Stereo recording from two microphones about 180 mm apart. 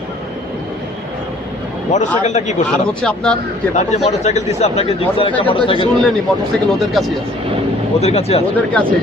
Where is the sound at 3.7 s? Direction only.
40° left (ahead or behind).